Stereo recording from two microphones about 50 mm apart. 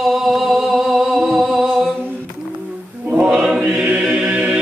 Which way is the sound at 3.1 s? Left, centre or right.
Right.